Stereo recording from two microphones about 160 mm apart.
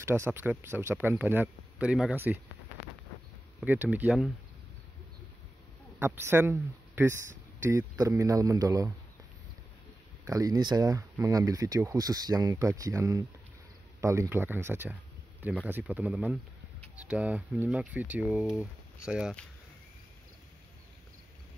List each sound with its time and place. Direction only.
0.0 s speech: 15° right (ahead or behind)
3.6 s speech: 10° right (ahead or behind)
5.9 s speech: 15° right (ahead or behind)
10.2 s speech: 20° right (ahead or behind); by 19.3 s 5° right (ahead or behind)